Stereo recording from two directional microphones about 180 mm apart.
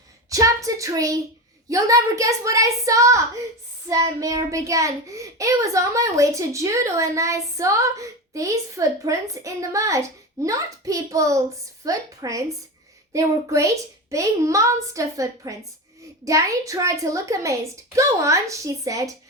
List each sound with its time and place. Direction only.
0.3 s a child's voice: 20° right (ahead or behind)